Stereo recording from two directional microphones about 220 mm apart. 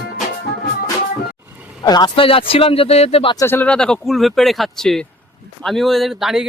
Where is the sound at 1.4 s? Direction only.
5° right (ahead or behind).